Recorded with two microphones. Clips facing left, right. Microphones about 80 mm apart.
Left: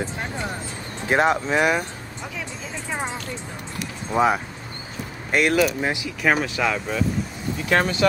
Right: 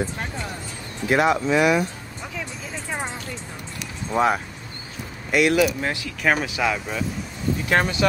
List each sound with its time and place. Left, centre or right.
1.0 s speech: left
4.1 s speech: centre
5.3 s speech: left
5.8 s speech: centre
6.2 s speech: centre